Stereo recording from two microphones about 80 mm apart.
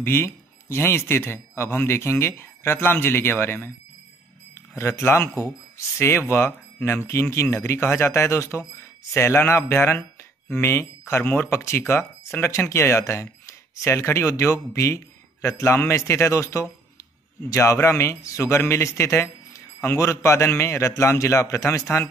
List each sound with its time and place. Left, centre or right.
0.0 s a man's voice: left